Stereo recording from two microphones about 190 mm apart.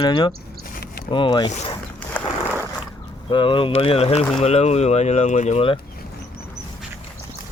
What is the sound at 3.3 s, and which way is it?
Speech, 25° left (ahead or behind).